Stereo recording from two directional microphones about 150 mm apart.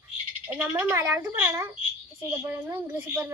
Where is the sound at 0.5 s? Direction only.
15° right (ahead or behind).